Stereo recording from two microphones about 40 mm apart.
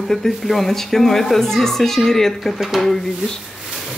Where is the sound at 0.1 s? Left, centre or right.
Centre.